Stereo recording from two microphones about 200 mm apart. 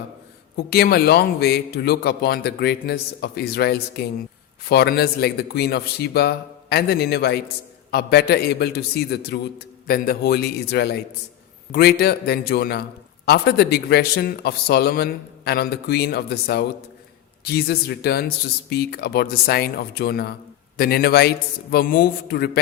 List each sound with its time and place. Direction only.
0.5 s speech: 50° left (ahead or behind)